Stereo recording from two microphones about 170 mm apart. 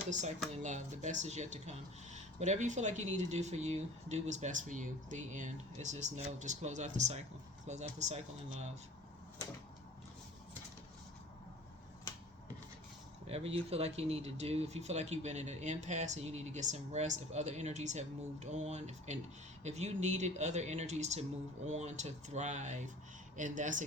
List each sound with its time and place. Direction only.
0.6 s speech: 45° right (ahead or behind)
13.2 s speech: 35° right (ahead or behind)